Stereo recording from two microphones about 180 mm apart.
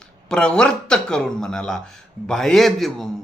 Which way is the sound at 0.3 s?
5° left (ahead or behind).